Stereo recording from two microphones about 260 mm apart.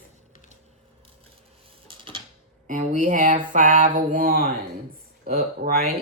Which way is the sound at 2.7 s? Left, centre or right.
Right.